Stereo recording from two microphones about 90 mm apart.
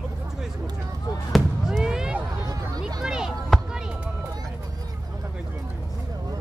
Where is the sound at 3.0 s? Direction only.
5° right (ahead or behind).